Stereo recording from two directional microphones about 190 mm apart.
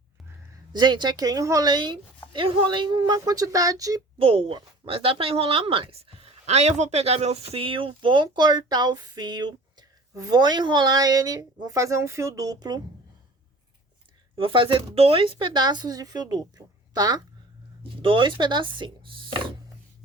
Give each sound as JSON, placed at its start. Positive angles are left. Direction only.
{"t": 0.7, "sound": "speech", "side_deg": -25}
{"t": 4.2, "sound": "speech", "side_deg": -30}
{"t": 14.3, "sound": "speech", "side_deg": -25}